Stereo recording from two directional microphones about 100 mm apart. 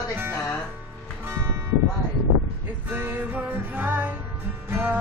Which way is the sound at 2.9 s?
20° right (ahead or behind).